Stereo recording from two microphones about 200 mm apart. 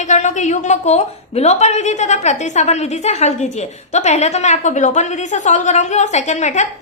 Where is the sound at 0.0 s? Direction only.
35° left (ahead or behind).